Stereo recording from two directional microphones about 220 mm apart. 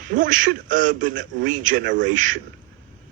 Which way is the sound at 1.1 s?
55° right (ahead or behind).